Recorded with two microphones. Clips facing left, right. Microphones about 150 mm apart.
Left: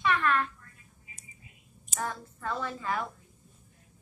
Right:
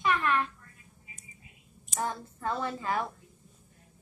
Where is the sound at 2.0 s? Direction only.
25° right (ahead or behind).